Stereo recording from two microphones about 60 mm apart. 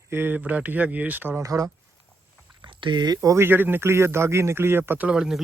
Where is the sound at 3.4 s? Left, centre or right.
Right.